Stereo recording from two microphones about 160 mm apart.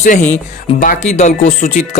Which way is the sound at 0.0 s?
50° left (ahead or behind).